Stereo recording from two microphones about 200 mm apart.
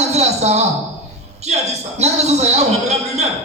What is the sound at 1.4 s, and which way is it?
A man's voice, 35° right (ahead or behind).